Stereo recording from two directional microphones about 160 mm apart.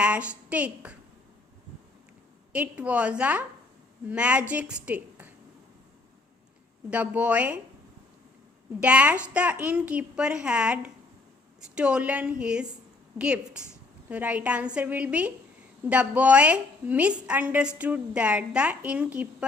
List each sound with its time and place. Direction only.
0.0 s a woman's voice: 10° right (ahead or behind)
2.5 s a woman's voice: 10° right (ahead or behind)
6.9 s a woman's voice: 10° right (ahead or behind)
8.8 s a woman's voice: 10° right (ahead or behind)